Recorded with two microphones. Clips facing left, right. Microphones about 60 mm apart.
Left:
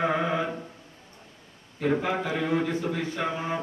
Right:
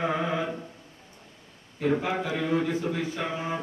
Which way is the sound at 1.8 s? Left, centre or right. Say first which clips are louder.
Even; centre.